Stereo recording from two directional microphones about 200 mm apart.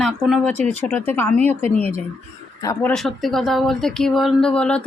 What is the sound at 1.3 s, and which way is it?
Speech, 35° right (ahead or behind).